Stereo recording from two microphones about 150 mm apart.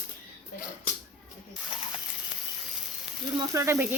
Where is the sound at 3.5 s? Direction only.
20° right (ahead or behind).